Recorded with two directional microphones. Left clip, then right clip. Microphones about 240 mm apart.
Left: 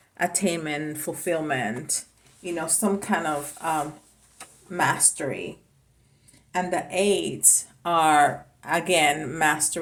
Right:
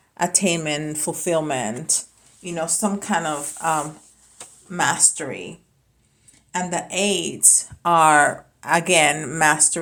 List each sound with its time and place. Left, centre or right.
0.1 s a woman's voice: right
6.5 s a woman's voice: right